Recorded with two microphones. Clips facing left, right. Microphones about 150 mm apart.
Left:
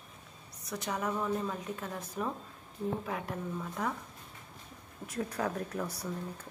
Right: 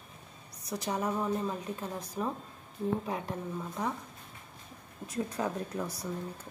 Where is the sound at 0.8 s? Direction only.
20° right (ahead or behind).